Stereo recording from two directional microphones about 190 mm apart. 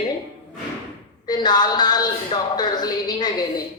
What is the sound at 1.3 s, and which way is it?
A man's voice, 20° left (ahead or behind).